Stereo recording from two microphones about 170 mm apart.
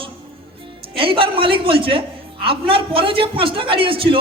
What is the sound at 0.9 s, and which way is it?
A woman's voice, 30° right (ahead or behind).